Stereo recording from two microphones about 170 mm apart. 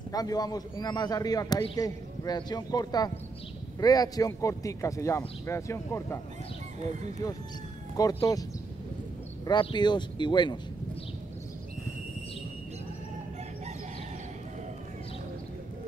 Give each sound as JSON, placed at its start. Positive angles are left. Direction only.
{"t": 0.1, "sound": "a man's voice", "side_deg": 20}
{"t": 8.0, "sound": "a man's voice", "side_deg": 20}
{"t": 9.5, "sound": "a man's voice", "side_deg": 25}